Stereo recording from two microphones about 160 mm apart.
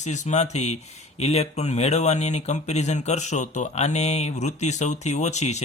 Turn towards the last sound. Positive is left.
turn(degrees=45)  # may be behind; listen again after turning